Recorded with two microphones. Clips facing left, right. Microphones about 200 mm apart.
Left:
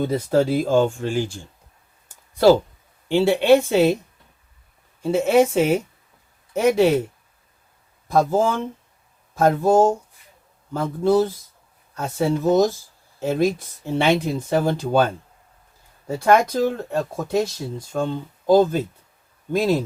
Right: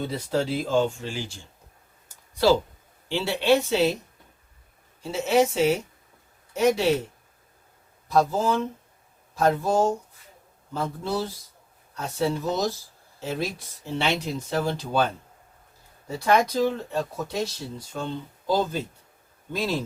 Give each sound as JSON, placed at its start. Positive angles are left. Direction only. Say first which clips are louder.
{"t": 0.0, "sound": "speech", "louder": "left 7 dB", "side_deg": 45}
{"t": 2.0, "sound": "a sound", "louder": "left 6 dB", "side_deg": 50}
{"t": 3.1, "sound": "speech", "louder": "left 7 dB", "side_deg": 50}
{"t": 5.0, "sound": "speech", "louder": "left 5 dB", "side_deg": 50}
{"t": 8.0, "sound": "speech", "louder": "left 4 dB", "side_deg": 50}
{"t": 16.0, "sound": "speech", "louder": "left 5 dB", "side_deg": 50}